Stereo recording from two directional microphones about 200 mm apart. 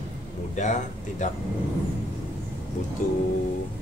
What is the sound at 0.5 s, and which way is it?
Speech, 40° left (ahead or behind).